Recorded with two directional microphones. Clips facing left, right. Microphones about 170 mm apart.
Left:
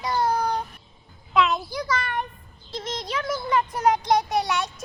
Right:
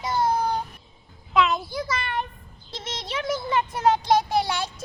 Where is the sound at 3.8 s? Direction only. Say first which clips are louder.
Right 2 dB; 25° right (ahead or behind).